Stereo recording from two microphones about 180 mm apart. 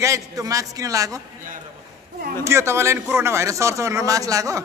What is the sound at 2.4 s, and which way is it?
A man's voice, 15° right (ahead or behind).